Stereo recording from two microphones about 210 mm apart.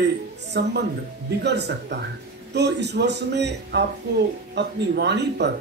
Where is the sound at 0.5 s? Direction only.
55° right (ahead or behind).